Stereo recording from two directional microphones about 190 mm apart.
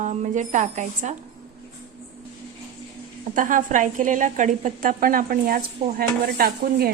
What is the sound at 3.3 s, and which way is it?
A woman's voice, 45° right (ahead or behind).